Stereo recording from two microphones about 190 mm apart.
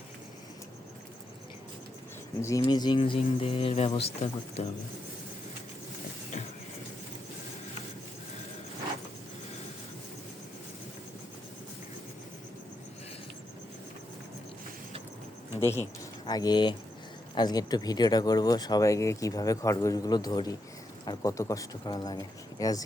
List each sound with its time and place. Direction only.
2.4 s speech: 20° left (ahead or behind)
15.6 s speech: 15° left (ahead or behind)